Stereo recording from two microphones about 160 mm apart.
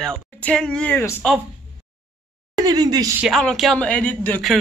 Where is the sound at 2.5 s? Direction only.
25° right (ahead or behind).